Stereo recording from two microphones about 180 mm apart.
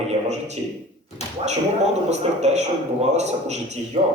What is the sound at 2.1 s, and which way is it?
A man's voice, 40° right (ahead or behind).